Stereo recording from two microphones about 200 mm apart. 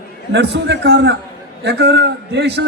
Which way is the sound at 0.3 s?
60° right (ahead or behind).